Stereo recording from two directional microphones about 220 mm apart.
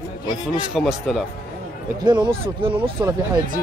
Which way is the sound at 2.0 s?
20° right (ahead or behind).